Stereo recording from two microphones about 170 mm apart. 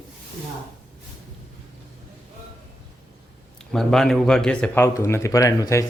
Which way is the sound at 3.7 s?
Centre (ahead or behind).